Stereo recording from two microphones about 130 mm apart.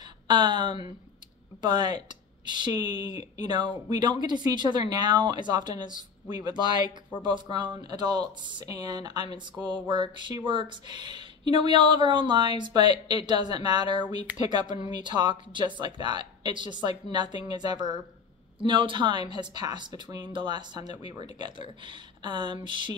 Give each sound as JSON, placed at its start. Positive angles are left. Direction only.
{"t": 0.3, "sound": "speech", "side_deg": -35}